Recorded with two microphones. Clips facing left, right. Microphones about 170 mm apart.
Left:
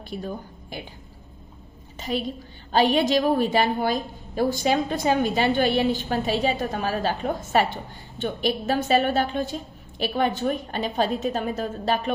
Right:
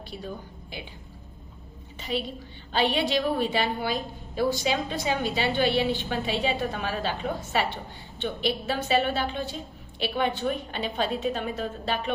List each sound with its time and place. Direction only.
0.1 s a woman's voice: 50° left (ahead or behind)
2.0 s a woman's voice: 45° left (ahead or behind)